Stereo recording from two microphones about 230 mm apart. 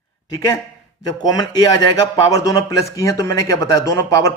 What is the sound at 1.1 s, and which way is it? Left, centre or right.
Speech, centre.